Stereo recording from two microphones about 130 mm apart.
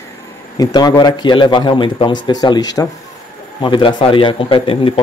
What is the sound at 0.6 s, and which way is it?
A man's voice, 30° left (ahead or behind).